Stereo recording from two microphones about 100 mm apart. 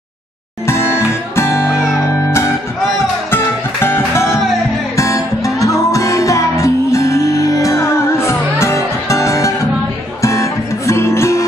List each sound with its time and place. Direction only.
0.7 s music: 25° left (ahead or behind)
3.8 s music: 25° left (ahead or behind)